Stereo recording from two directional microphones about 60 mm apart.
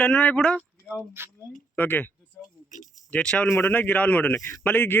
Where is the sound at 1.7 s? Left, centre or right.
Left.